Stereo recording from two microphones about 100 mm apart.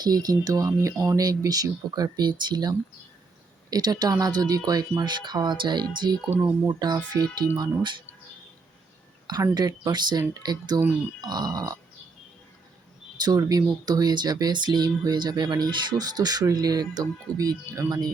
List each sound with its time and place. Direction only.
0.0 s speech: 40° right (ahead or behind)
9.2 s speech: 40° right (ahead or behind)
13.1 s speech: 40° right (ahead or behind)